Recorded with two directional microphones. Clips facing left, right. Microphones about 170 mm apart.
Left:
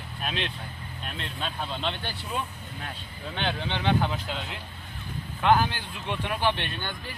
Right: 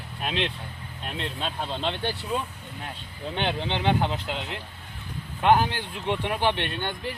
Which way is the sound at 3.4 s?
20° right (ahead or behind).